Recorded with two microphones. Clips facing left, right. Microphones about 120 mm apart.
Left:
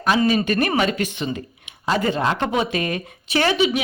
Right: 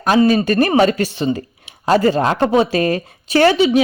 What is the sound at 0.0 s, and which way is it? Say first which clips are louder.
Speech: right 5 dB; 40° right (ahead or behind).